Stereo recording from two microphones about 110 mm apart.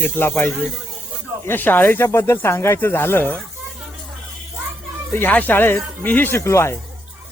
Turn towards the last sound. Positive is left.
turn(degrees=25)  # may be behind; listen again after turning